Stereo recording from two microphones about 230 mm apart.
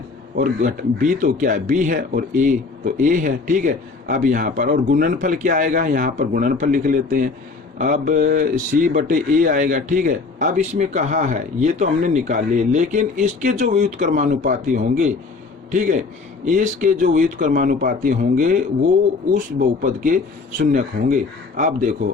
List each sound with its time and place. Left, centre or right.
0.3 s speech: right